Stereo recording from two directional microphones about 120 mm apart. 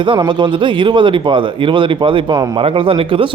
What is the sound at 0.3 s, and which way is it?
Speech, 40° right (ahead or behind).